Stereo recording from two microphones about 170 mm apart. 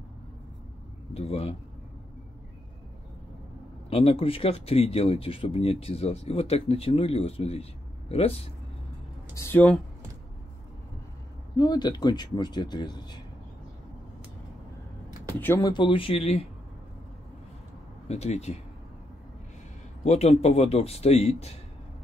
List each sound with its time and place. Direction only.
1.1 s speech: 40° left (ahead or behind)
3.9 s speech: 35° left (ahead or behind)
9.3 s speech: 15° left (ahead or behind)
11.5 s speech: 25° left (ahead or behind)
15.4 s speech: 10° left (ahead or behind)
15.7 s speech: 30° left (ahead or behind)
18.0 s speech: 40° left (ahead or behind)
20.1 s speech: 40° left (ahead or behind)